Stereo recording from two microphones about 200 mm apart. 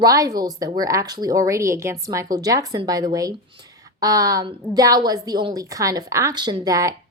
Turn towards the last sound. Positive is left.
turn(degrees=-15)  # may be behind; listen again after turning